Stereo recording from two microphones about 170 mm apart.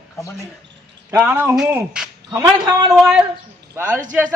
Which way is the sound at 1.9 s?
10° right (ahead or behind).